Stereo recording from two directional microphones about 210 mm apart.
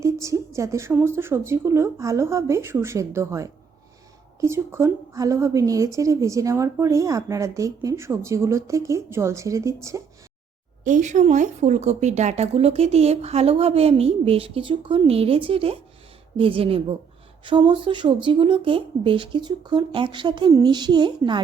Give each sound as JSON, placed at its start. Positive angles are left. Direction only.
{"t": 0.0, "sound": "a woman's voice", "side_deg": -15}
{"t": 10.8, "sound": "speech", "side_deg": -35}